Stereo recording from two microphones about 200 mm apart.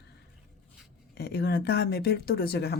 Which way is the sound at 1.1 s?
55° left (ahead or behind).